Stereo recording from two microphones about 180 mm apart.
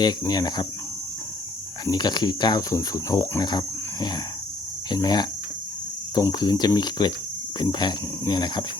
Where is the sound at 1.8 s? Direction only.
25° left (ahead or behind).